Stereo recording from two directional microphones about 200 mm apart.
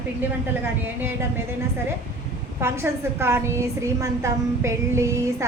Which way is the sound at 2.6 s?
15° right (ahead or behind).